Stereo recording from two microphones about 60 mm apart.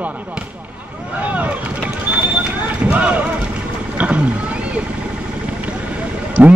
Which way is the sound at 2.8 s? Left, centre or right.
Right.